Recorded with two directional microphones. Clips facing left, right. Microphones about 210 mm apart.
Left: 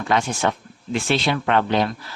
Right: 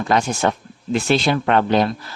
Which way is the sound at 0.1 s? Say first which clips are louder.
Right 2 dB; 40° right (ahead or behind).